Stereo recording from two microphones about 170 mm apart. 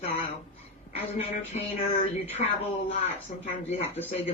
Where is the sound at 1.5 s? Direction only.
40° left (ahead or behind).